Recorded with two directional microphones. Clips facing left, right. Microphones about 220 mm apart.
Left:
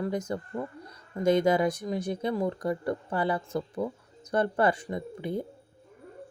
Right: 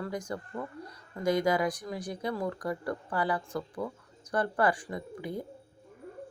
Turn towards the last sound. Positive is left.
turn(degrees=25)  # may be behind; listen again after turning